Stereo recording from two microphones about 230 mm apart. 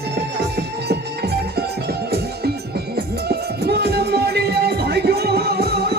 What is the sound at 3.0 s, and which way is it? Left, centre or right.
Music, right.